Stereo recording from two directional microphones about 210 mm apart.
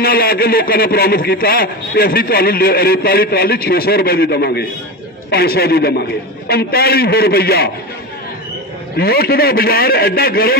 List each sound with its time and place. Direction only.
0.0 s a man's voice: 45° left (ahead or behind)
8.9 s a man's voice: 45° left (ahead or behind)